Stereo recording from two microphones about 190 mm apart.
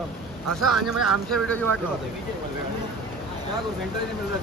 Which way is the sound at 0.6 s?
Centre (ahead or behind).